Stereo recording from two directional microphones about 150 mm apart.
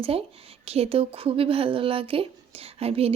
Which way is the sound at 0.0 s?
40° right (ahead or behind).